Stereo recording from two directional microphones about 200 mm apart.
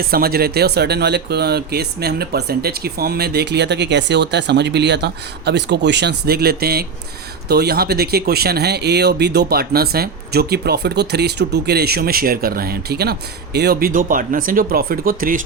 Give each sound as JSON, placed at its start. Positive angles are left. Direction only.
{"t": 0.0, "sound": "speech", "side_deg": -50}